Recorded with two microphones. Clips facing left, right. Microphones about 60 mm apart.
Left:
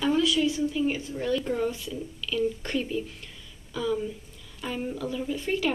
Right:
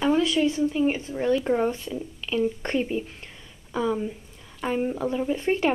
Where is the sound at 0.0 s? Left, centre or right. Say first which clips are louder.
Right 2 dB; right.